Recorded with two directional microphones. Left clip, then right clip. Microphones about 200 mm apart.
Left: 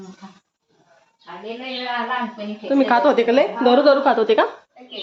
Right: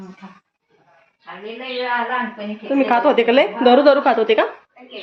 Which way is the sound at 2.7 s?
5° left (ahead or behind).